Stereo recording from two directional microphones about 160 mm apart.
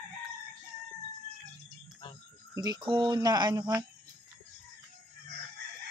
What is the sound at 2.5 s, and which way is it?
Speech, 25° right (ahead or behind).